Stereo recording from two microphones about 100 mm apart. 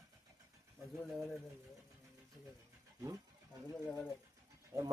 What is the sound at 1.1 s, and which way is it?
Speech, centre (ahead or behind).